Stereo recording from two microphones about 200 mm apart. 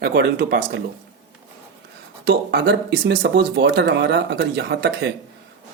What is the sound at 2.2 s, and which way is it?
Speech, 55° right (ahead or behind).